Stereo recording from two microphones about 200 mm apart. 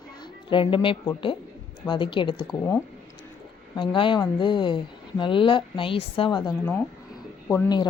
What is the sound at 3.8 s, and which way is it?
Speech, 25° left (ahead or behind).